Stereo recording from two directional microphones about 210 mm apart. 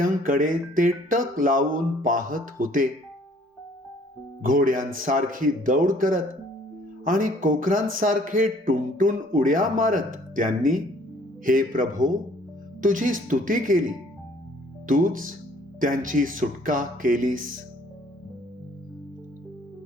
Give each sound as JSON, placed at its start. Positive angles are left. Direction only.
{"t": 0.0, "sound": "speech", "side_deg": -40}
{"t": 4.4, "sound": "speech", "side_deg": -40}
{"t": 14.8, "sound": "speech", "side_deg": -40}